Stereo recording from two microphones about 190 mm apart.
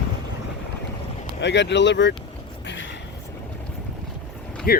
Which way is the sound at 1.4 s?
65° left (ahead or behind).